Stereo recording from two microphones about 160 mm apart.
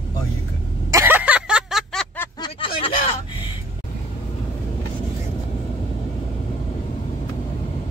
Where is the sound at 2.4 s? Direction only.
35° left (ahead or behind).